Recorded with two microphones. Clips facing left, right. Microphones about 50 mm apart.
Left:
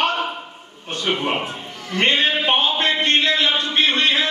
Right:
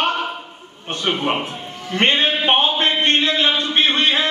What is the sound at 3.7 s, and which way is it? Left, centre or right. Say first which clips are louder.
Music: even; right.